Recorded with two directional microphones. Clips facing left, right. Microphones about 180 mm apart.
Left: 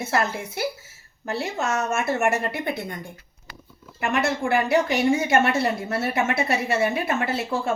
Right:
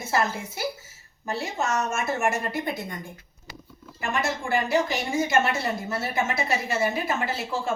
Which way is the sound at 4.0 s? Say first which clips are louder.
Left 4 dB; 65° left (ahead or behind).